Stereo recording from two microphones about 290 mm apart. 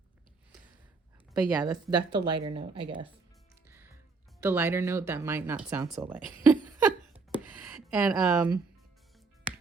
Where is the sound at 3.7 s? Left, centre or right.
Centre.